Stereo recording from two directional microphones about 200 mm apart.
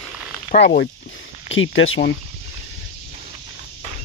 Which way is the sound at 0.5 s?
45° left (ahead or behind).